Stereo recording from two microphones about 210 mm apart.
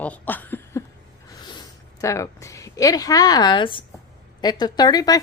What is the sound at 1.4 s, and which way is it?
A woman's voice, 20° left (ahead or behind).